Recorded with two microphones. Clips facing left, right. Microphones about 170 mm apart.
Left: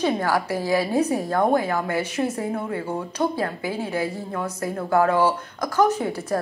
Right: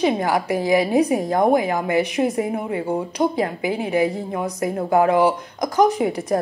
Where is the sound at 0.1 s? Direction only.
15° right (ahead or behind).